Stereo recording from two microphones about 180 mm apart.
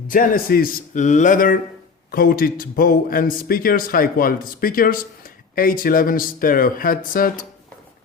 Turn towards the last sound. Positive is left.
turn(degrees=50)  # may be behind; listen again after turning